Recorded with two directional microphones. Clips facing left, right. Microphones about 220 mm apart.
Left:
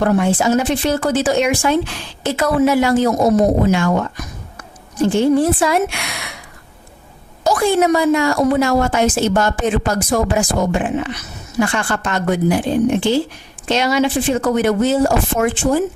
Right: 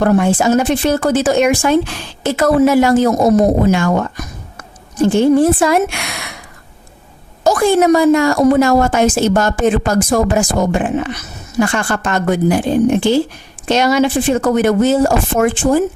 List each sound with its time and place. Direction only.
0.0 s a woman's voice: 50° right (ahead or behind)
5.0 s a woman's voice: 45° right (ahead or behind)
7.4 s a woman's voice: 45° right (ahead or behind)